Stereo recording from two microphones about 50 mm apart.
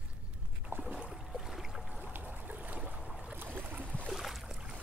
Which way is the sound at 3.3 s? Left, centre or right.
Right.